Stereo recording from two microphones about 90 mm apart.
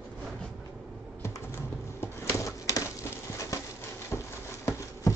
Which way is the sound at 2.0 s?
30° left (ahead or behind).